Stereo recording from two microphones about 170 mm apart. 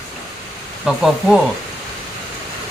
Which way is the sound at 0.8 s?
Centre (ahead or behind).